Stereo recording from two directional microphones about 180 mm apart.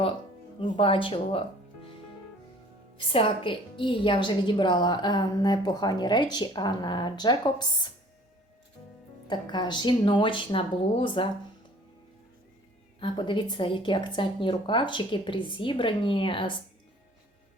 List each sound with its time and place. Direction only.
0.6 s a woman's voice: 30° left (ahead or behind)
3.1 s a woman's voice: 30° left (ahead or behind)
9.2 s a woman's voice: 25° left (ahead or behind)
13.0 s a woman's voice: 25° left (ahead or behind)